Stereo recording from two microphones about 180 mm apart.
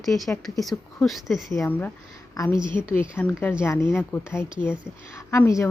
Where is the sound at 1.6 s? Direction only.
10° left (ahead or behind).